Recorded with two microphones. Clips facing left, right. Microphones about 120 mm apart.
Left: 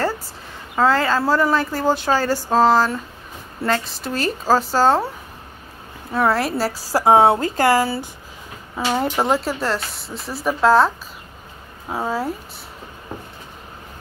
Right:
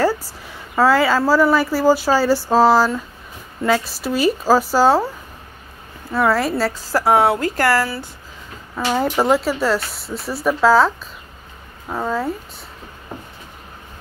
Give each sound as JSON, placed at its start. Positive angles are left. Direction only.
{"t": 0.7, "sound": "speech", "side_deg": -10}
{"t": 6.3, "sound": "speech", "side_deg": 0}
{"t": 6.9, "sound": "a woman's voice", "side_deg": 20}
{"t": 9.0, "sound": "speech", "side_deg": 0}
{"t": 11.9, "sound": "speech", "side_deg": 5}